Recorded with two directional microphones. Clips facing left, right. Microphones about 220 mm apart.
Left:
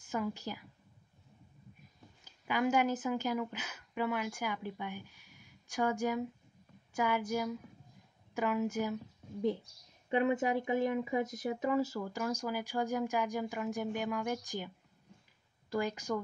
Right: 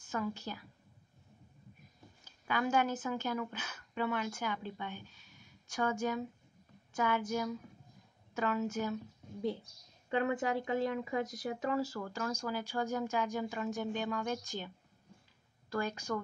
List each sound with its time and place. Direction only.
0.1 s speech: 15° left (ahead or behind)
2.4 s a woman's voice: 15° left (ahead or behind)
10.0 s speech: 20° left (ahead or behind)
15.7 s speech: 15° left (ahead or behind)